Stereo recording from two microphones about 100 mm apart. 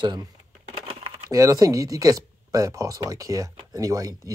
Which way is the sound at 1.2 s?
30° right (ahead or behind).